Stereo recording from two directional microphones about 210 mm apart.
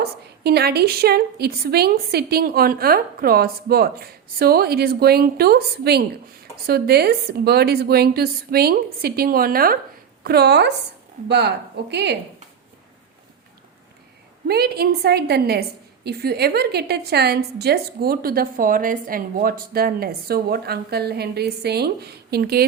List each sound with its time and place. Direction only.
0.0 s a woman's voice: 50° right (ahead or behind)
14.4 s a woman's voice: 50° right (ahead or behind)